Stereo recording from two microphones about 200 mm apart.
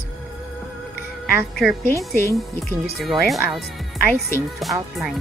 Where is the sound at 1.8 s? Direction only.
15° left (ahead or behind).